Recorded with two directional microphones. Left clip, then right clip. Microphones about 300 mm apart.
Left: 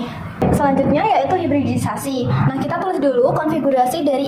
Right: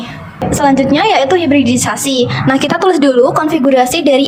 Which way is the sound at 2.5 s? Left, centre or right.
Right.